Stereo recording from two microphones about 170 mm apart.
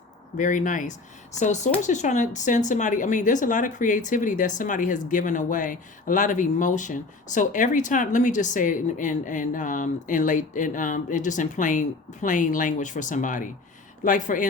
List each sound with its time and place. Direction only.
0.3 s speech: 50° left (ahead or behind)